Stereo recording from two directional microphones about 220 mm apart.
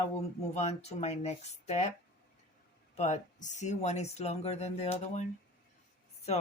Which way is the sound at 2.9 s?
30° left (ahead or behind).